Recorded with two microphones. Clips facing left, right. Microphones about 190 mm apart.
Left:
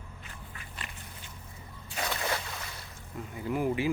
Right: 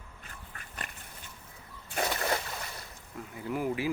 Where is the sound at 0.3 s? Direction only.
45° right (ahead or behind).